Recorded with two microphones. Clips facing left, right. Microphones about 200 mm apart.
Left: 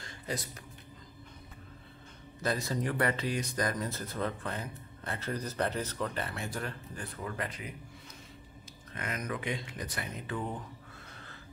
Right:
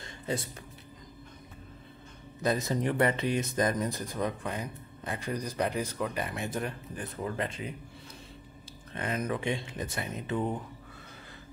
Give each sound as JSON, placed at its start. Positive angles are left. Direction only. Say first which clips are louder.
{"t": 0.0, "sound": "a sound", "louder": "right 4 dB", "side_deg": -25}
{"t": 2.4, "sound": "speech", "louder": "right 4 dB", "side_deg": -20}
{"t": 8.9, "sound": "speech", "louder": "right 5 dB", "side_deg": -30}